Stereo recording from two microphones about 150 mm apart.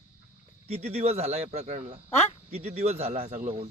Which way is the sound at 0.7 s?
40° right (ahead or behind).